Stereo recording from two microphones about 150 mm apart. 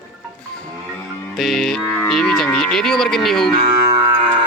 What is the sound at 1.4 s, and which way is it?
Speech, centre (ahead or behind).